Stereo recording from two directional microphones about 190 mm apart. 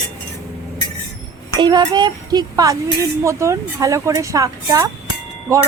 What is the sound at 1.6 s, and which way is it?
A woman's voice, 20° right (ahead or behind).